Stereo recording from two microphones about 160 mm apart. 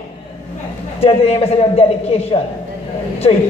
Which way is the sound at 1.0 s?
40° left (ahead or behind).